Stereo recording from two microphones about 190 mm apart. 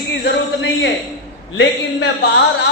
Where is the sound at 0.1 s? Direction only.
70° left (ahead or behind).